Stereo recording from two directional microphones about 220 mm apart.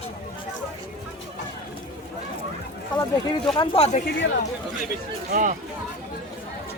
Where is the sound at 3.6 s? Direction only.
25° left (ahead or behind).